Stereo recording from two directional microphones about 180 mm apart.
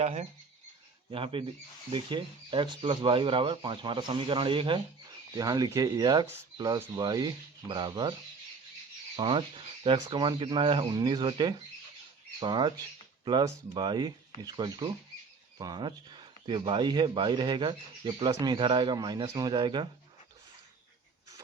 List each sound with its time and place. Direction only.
0.0 s speech: 40° right (ahead or behind)
1.1 s speech: 30° right (ahead or behind)
9.1 s speech: 25° right (ahead or behind)